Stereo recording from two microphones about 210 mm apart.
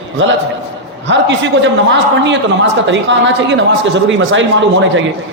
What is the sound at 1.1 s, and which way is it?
A man's voice, 60° right (ahead or behind).